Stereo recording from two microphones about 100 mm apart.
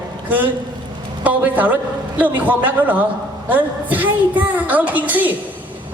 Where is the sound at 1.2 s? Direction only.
15° right (ahead or behind).